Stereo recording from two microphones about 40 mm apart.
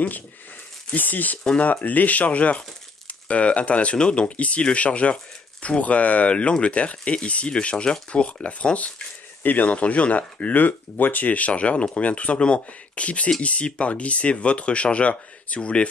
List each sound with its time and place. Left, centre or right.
0.9 s speech: left
9.4 s speech: left
9.7 s speech: left